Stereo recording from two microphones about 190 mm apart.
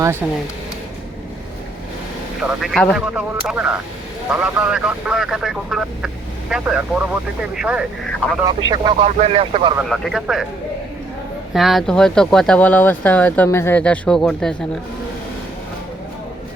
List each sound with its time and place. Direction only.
2.4 s speech: centre (ahead or behind)
8.4 s speech: 20° right (ahead or behind)
9.9 s speech: centre (ahead or behind)
11.5 s speech: centre (ahead or behind)